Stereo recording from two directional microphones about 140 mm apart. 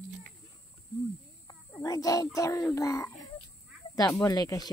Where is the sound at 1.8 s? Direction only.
25° left (ahead or behind).